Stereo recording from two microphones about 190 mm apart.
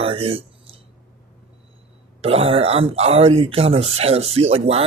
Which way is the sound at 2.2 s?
30° right (ahead or behind).